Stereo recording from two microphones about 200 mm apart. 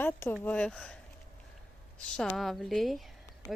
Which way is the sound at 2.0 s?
5° left (ahead or behind).